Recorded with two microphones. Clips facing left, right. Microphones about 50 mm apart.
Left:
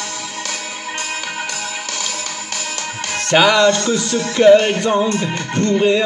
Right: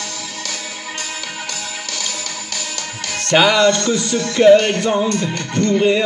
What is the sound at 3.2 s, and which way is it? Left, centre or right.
Music, centre.